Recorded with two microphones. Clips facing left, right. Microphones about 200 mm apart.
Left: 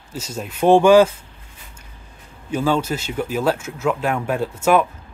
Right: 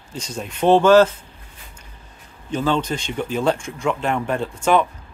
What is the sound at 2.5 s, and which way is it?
Speech, 10° left (ahead or behind).